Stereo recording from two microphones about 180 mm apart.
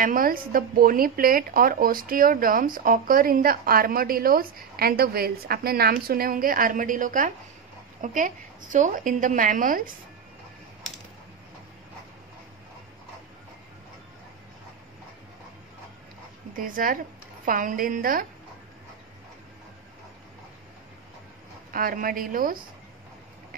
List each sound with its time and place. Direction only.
0.0 s speech: 50° right (ahead or behind)
16.5 s speech: 50° right (ahead or behind)
21.7 s speech: 50° right (ahead or behind)